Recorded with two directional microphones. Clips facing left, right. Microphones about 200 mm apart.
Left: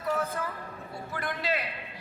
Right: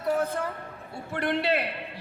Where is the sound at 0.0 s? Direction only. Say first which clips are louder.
Right 4 dB; 30° right (ahead or behind).